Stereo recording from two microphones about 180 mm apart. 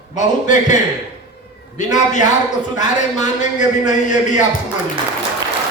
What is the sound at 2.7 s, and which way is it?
A man's voice, 45° left (ahead or behind).